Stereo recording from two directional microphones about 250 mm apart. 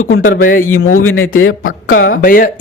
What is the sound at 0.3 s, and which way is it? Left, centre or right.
Speech, left.